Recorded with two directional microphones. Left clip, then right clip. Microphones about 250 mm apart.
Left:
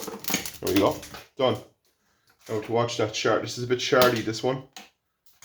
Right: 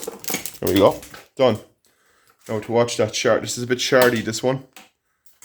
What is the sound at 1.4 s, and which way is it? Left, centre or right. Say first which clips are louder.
Speech: right 7 dB; right.